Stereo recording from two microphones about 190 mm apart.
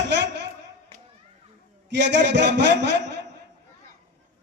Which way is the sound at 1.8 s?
65° right (ahead or behind).